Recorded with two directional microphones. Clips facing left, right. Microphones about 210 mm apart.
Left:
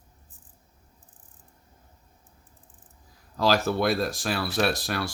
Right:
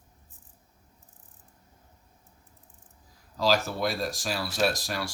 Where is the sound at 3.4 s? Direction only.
60° left (ahead or behind).